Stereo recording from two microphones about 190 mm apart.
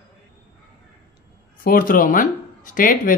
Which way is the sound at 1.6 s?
45° left (ahead or behind).